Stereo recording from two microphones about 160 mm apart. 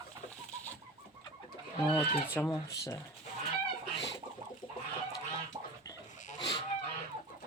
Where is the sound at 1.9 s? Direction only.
15° left (ahead or behind).